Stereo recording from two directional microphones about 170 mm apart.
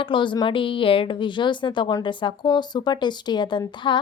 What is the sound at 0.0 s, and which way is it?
A woman's voice, 30° left (ahead or behind).